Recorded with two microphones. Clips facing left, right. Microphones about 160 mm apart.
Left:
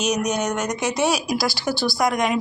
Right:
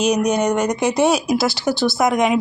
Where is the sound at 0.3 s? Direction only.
30° right (ahead or behind).